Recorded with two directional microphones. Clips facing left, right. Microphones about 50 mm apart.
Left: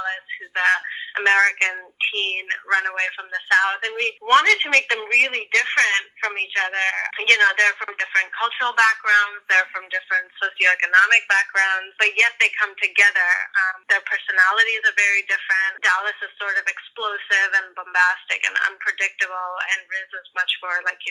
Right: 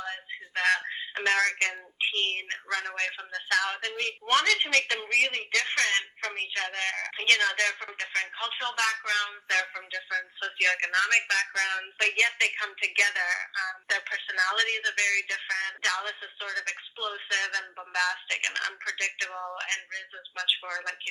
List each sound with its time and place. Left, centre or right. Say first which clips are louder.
0.0 s a sound: left 9 dB; left
0.6 s speech: left 6 dB; left
1.1 s speech: left 9 dB; left